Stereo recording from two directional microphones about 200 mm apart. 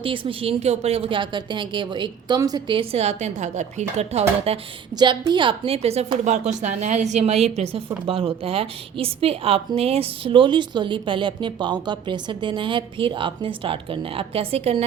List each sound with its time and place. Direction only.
0.0 s a woman's voice: 25° right (ahead or behind)